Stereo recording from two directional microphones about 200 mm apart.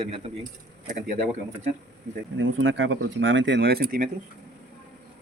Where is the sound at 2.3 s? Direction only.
70° right (ahead or behind); by 4.1 s 45° right (ahead or behind).